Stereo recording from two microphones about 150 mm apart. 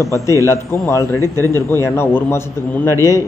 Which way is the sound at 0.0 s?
20° left (ahead or behind).